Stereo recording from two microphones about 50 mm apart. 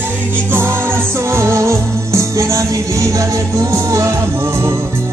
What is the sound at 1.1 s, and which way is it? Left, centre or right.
Music, right.